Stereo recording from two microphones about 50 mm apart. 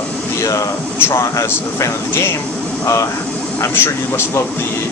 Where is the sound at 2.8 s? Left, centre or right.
Left.